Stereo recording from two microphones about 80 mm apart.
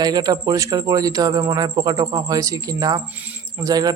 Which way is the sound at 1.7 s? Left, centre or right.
Right.